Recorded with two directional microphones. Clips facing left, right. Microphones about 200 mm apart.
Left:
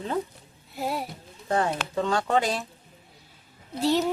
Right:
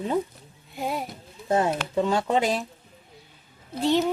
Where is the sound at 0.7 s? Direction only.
Centre (ahead or behind).